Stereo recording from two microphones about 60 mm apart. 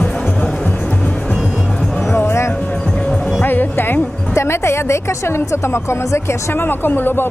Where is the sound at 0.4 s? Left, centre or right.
Left.